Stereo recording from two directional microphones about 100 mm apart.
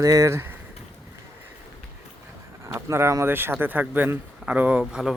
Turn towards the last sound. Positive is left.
turn(degrees=-10)  # may be behind; listen again after turning